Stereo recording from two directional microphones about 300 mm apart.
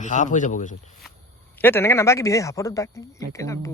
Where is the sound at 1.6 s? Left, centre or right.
Centre.